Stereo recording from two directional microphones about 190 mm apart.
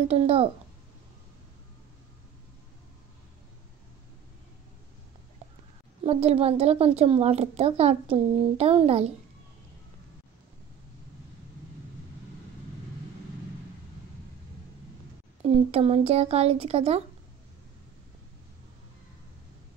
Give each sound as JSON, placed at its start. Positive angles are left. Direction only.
{"t": 0.1, "sound": "speech", "side_deg": -30}
{"t": 6.0, "sound": "speech", "side_deg": -30}
{"t": 15.4, "sound": "speech", "side_deg": -30}